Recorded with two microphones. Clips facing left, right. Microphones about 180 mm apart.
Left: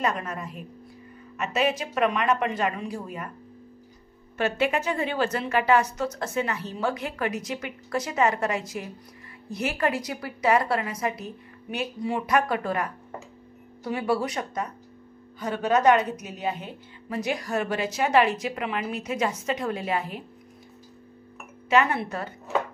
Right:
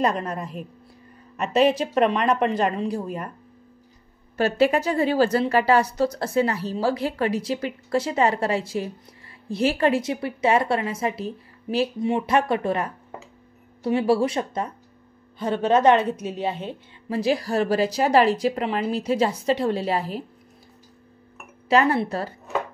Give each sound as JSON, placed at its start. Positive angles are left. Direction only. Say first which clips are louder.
{"t": 0.0, "sound": "a woman's voice", "louder": "right 4 dB", "side_deg": -35}
{"t": 4.4, "sound": "a woman's voice", "louder": "right 5 dB", "side_deg": -35}
{"t": 21.6, "sound": "a woman's voice", "louder": "right 3 dB", "side_deg": -35}